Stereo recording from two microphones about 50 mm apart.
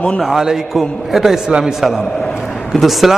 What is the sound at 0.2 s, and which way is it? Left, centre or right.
A man's voice, centre.